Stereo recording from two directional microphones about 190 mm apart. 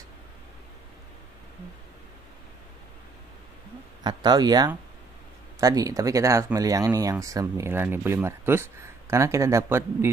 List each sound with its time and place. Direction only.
4.0 s speech: 20° right (ahead or behind)